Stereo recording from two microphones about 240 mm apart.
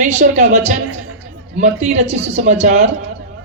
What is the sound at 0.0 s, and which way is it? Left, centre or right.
A woman's voice, right.